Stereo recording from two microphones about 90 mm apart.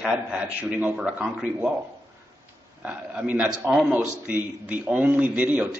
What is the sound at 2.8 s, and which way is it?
A man's voice, 15° right (ahead or behind).